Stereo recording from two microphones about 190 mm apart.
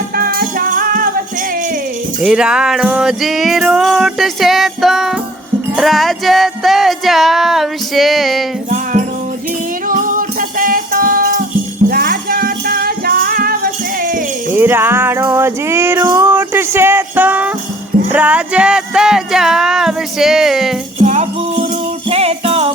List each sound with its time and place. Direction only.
0.2 s music: 50° right (ahead or behind)
2.2 s music: 5° right (ahead or behind)
8.7 s music: 40° right (ahead or behind)
14.5 s music: 10° right (ahead or behind)
21.0 s music: 35° right (ahead or behind)